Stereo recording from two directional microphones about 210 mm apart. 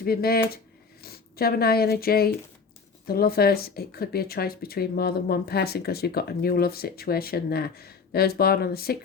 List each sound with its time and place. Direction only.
0.0 s speech: 45° left (ahead or behind)